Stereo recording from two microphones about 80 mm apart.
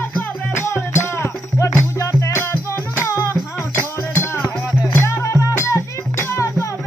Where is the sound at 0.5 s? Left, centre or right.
Left.